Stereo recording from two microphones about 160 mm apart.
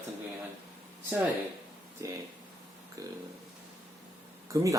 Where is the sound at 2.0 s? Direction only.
20° right (ahead or behind).